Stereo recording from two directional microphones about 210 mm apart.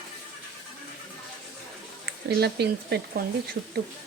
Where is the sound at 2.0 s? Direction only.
50° right (ahead or behind).